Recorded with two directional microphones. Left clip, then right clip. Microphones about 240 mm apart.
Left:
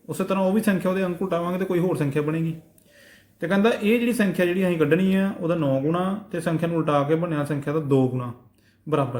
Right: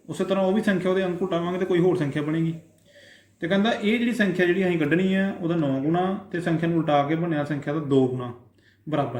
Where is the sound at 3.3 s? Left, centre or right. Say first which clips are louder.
Left 2 dB; left.